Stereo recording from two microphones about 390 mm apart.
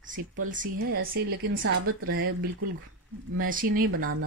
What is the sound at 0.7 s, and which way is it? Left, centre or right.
A woman's voice, right.